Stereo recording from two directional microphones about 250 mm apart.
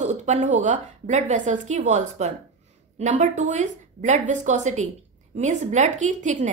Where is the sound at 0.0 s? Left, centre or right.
Right.